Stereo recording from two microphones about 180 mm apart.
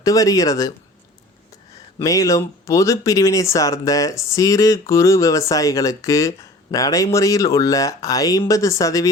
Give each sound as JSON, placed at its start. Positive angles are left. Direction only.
{"t": 0.0, "sound": "speech", "side_deg": 20}
{"t": 2.0, "sound": "speech", "side_deg": 20}